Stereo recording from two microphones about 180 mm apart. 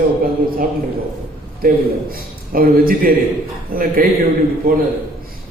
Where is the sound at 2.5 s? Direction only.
55° right (ahead or behind).